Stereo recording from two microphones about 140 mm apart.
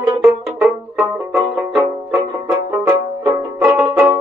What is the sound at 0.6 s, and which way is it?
Music, 5° right (ahead or behind).